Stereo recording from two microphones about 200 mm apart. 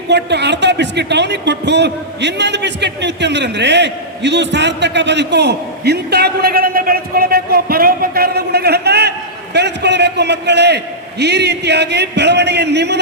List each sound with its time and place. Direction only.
0.1 s a man's voice: 60° right (ahead or behind)